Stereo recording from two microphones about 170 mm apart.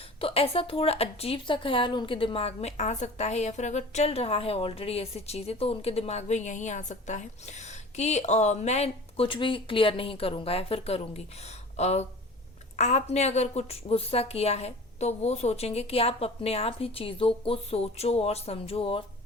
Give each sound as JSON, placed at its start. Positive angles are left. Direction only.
{"t": 0.2, "sound": "a woman's voice", "side_deg": 35}